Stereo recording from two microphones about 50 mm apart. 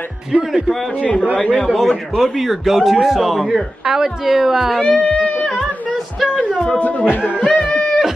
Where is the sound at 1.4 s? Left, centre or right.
Centre.